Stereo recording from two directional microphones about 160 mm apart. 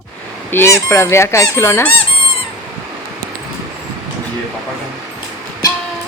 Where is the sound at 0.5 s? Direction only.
15° left (ahead or behind).